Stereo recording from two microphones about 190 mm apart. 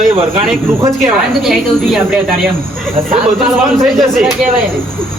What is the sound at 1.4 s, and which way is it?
Speech, centre (ahead or behind).